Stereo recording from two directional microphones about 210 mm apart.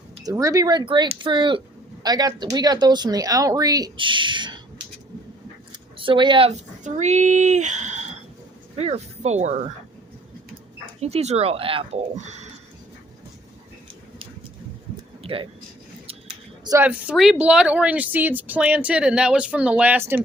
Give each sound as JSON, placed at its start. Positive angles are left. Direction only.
{"t": 0.3, "sound": "speech", "side_deg": -15}
{"t": 6.0, "sound": "speech", "side_deg": -25}
{"t": 6.8, "sound": "speech", "side_deg": -35}
{"t": 11.0, "sound": "speech", "side_deg": -30}
{"t": 15.2, "sound": "a sound", "side_deg": -25}
{"t": 16.6, "sound": "speech", "side_deg": -10}